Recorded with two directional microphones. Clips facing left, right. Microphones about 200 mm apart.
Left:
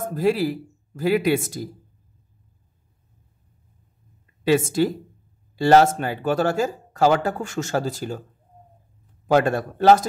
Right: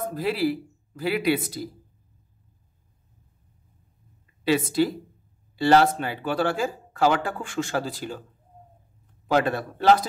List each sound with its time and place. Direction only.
0.1 s speech: 45° left (ahead or behind)
4.5 s speech: 45° left (ahead or behind)
9.3 s speech: 45° left (ahead or behind)